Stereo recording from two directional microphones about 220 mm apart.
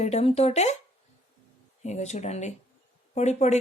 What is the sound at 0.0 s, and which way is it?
Speech, 30° left (ahead or behind).